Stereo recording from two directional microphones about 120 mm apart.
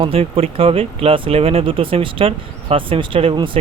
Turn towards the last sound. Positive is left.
turn(degrees=-45)  # may be behind; listen again after turning